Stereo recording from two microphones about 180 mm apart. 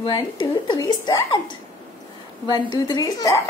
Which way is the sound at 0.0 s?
25° left (ahead or behind).